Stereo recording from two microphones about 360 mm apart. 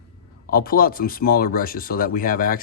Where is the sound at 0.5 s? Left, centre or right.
Left.